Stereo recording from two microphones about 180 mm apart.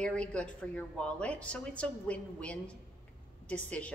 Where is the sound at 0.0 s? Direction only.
5° left (ahead or behind).